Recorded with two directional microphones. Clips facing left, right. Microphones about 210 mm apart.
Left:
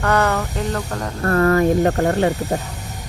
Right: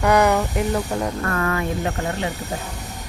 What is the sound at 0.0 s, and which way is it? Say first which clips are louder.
Speech: right 2 dB; 15° right (ahead or behind).